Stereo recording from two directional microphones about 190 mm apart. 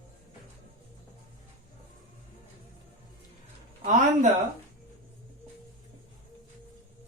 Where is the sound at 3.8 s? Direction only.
40° right (ahead or behind).